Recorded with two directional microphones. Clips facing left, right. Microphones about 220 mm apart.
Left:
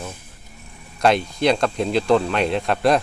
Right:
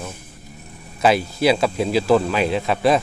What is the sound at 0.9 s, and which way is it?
Speech, 5° right (ahead or behind).